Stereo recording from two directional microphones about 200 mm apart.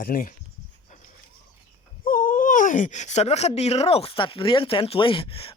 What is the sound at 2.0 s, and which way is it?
Speech, 45° left (ahead or behind).